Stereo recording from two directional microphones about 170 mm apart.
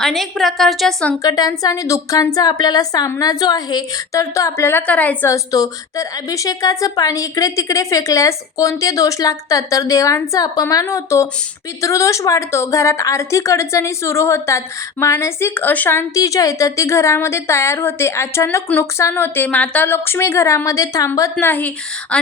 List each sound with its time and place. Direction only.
0.0 s a woman's voice: centre (ahead or behind)
1.2 s a woman's voice: 20° left (ahead or behind)